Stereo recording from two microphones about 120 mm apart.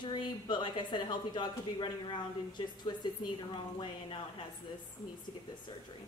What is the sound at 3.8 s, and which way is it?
Speech, 45° left (ahead or behind).